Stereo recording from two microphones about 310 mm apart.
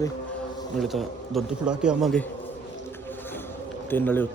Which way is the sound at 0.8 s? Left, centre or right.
Centre.